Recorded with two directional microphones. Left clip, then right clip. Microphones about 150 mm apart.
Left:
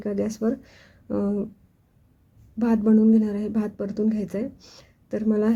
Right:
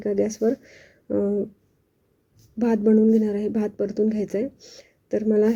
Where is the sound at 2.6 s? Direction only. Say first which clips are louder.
Right 2 dB; 10° right (ahead or behind).